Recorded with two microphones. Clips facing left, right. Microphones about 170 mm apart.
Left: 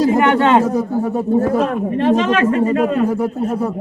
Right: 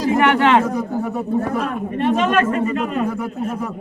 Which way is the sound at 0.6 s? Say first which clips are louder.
Left 4 dB; 35° left (ahead or behind).